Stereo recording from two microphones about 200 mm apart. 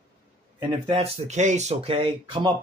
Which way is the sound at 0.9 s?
30° right (ahead or behind).